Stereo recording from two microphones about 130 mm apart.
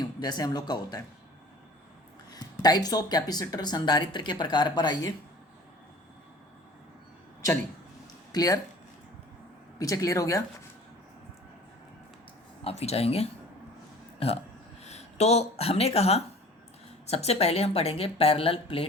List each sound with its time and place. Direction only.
0.0 s speech: 30° left (ahead or behind)
2.3 s speech: 30° left (ahead or behind)
8.3 s speech: 30° left (ahead or behind)
9.7 s speech: 25° left (ahead or behind)
12.6 s a woman's voice: 55° left (ahead or behind)
14.8 s a woman's voice: 55° left (ahead or behind)